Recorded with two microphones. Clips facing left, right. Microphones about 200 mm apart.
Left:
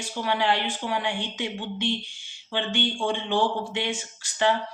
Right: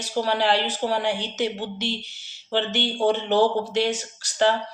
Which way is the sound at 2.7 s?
80° right.